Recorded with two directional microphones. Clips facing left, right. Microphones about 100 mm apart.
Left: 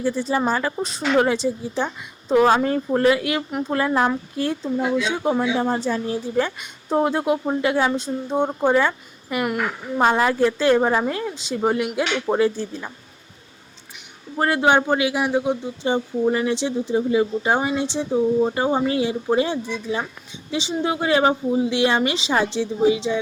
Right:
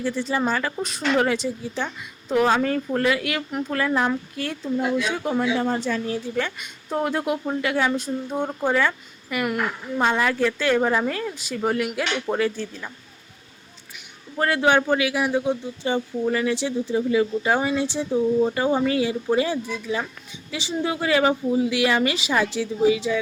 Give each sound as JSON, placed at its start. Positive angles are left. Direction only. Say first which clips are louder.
{"t": 0.0, "sound": "a woman's voice", "louder": "left 2 dB", "side_deg": 35}
{"t": 14.3, "sound": "speech", "louder": "left 2 dB", "side_deg": 25}